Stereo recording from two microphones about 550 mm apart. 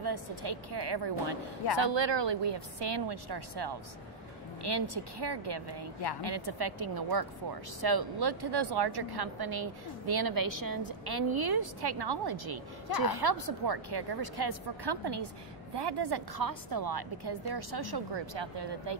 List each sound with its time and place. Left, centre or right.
0.0 s a woman's voice: right